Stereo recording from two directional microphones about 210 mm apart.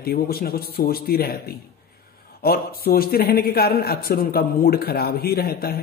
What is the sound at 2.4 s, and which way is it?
Speech, 45° left (ahead or behind).